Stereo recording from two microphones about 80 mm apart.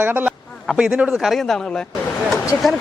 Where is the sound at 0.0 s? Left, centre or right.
Right.